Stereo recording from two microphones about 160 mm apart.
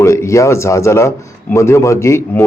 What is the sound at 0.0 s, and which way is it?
A man's voice, 20° left (ahead or behind).